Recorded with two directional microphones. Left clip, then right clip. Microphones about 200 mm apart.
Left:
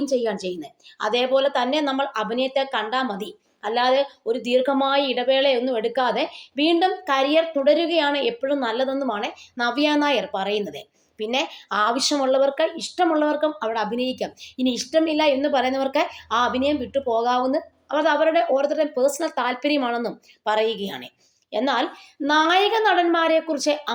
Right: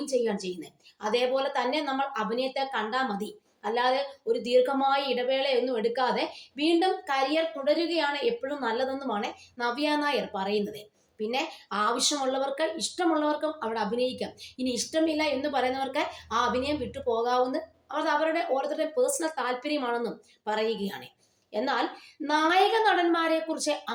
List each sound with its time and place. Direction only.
0.1 s a woman's voice: 30° left (ahead or behind)